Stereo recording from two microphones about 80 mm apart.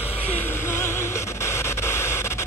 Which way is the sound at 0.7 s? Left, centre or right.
Left.